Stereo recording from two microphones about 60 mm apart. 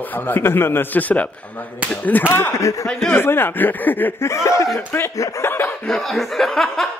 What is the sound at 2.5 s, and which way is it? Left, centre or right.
Speech, left.